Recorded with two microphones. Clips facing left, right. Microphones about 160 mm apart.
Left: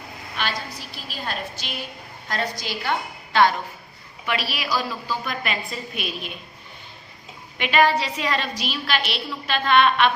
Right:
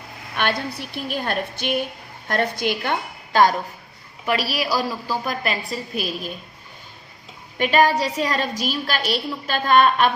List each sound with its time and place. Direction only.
0.3 s a woman's voice: 60° right (ahead or behind); by 6.3 s 35° right (ahead or behind)
7.6 s a woman's voice: 40° right (ahead or behind)